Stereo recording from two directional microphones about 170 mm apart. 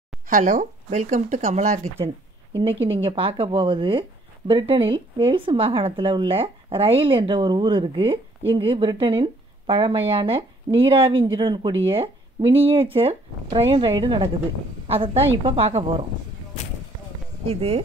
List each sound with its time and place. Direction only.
0.3 s speech: 50° right (ahead or behind)
2.6 s speech: 35° right (ahead or behind)
17.5 s speech: 35° right (ahead or behind)